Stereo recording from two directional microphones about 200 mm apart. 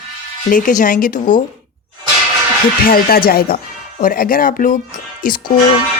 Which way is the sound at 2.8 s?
45° left (ahead or behind).